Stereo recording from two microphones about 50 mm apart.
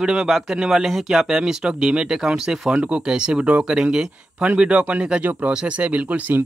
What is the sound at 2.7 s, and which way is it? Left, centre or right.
Speech, right.